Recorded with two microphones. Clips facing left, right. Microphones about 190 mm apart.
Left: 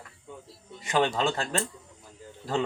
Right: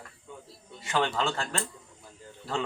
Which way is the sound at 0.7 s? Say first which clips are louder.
Left 3 dB; 15° left (ahead or behind).